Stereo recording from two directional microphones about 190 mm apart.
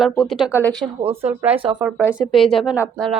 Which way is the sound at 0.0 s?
Centre (ahead or behind).